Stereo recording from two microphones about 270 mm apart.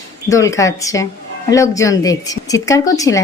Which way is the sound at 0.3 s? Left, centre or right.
Centre.